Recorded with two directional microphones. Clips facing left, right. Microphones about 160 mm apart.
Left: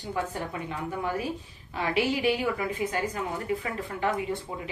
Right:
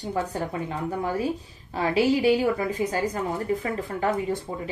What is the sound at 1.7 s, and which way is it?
A woman's voice, 35° right (ahead or behind).